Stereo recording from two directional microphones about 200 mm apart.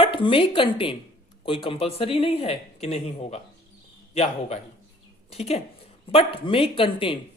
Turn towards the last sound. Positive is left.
turn(degrees=25)  # may be behind; listen again after turning